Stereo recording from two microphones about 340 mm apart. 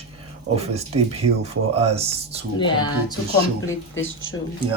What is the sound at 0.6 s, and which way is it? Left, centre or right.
Speech, centre.